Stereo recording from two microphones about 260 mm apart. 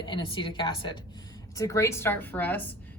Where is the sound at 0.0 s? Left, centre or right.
Centre.